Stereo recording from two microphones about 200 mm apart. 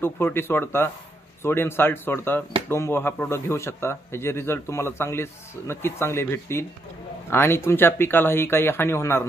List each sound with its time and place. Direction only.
0.0 s a man's voice: 10° left (ahead or behind)